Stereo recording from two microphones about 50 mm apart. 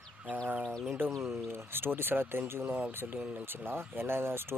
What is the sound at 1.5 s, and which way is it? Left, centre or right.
Speech, right.